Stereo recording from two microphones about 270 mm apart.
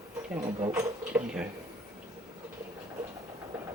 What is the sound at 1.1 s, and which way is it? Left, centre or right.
Dishes, centre.